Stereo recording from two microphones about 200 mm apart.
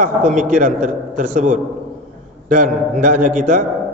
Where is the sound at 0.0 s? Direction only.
40° right (ahead or behind).